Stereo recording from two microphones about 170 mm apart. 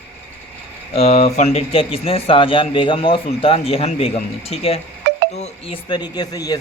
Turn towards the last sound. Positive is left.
turn(degrees=20)  # may be behind; listen again after turning